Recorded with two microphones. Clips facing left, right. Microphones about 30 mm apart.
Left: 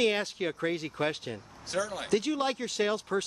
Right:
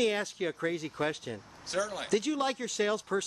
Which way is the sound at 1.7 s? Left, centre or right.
Centre.